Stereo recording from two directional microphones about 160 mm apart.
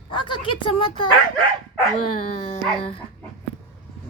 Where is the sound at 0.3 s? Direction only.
30° left (ahead or behind).